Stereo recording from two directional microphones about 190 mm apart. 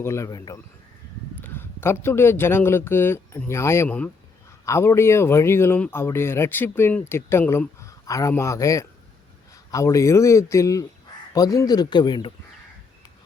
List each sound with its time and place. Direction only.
0.0 s speech: 15° left (ahead or behind)